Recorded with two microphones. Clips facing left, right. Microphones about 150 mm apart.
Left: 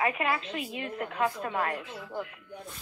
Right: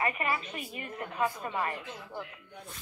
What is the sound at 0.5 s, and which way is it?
Speech, 90° left.